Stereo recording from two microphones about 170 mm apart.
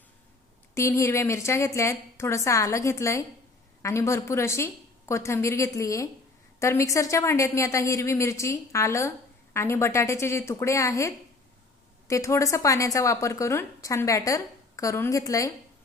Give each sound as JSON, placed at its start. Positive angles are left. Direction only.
{"t": 0.7, "sound": "a woman's voice", "side_deg": 15}